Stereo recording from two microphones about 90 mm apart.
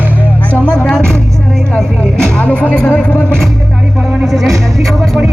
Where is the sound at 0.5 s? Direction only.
15° left (ahead or behind).